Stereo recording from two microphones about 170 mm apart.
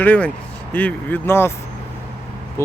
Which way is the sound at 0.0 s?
10° left (ahead or behind).